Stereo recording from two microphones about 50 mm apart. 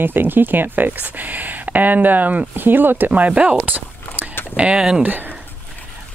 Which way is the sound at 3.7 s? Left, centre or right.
Right.